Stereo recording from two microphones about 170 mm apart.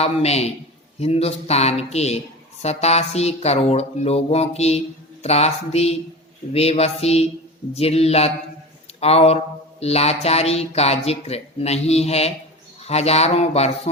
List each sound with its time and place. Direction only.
0.0 s speech: 40° left (ahead or behind)